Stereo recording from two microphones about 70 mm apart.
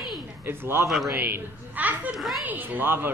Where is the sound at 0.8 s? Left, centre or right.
Centre.